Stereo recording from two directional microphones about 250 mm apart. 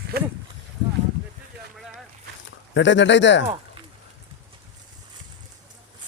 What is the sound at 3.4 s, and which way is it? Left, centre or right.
Speech, centre.